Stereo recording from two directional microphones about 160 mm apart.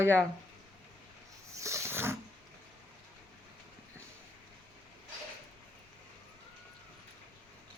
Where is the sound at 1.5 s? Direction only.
20° right (ahead or behind).